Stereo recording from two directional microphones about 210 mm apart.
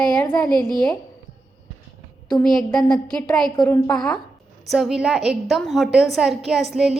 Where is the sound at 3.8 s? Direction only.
5° left (ahead or behind).